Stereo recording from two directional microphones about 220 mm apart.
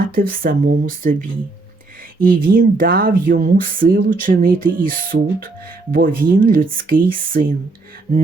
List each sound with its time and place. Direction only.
0.1 s speech: 40° right (ahead or behind)